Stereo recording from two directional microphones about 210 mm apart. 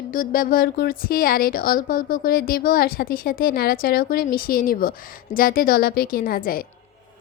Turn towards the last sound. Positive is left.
turn(degrees=45)  # may be behind; listen again after turning